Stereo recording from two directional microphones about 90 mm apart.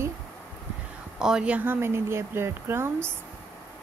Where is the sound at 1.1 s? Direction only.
10° right (ahead or behind); by 3.1 s 30° right (ahead or behind).